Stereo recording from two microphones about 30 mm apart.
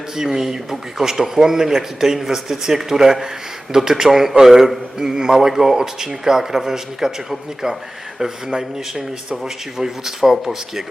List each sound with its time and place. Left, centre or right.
0.2 s a man's voice: centre
4.9 s a man's voice: right